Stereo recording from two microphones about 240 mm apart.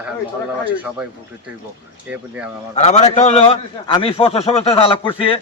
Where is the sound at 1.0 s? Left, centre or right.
Centre.